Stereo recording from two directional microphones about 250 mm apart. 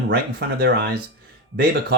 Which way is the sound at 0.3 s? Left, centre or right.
Right.